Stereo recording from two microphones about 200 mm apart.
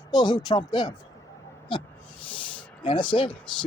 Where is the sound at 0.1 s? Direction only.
20° left (ahead or behind).